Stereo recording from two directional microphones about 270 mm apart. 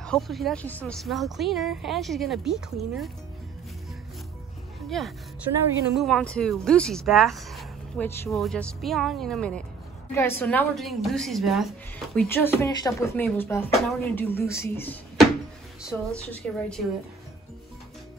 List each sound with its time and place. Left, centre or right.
0.0 s speech: centre
4.8 s a woman's voice: centre